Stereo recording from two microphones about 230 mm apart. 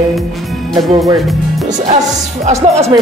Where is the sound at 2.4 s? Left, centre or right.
Right.